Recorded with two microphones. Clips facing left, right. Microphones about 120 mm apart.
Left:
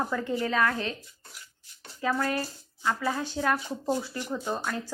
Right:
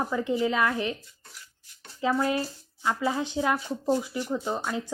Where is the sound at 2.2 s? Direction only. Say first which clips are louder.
Right 3 dB; 20° right (ahead or behind).